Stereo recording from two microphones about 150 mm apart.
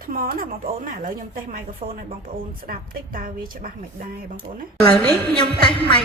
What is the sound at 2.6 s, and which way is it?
A woman's voice, 75° right (ahead or behind).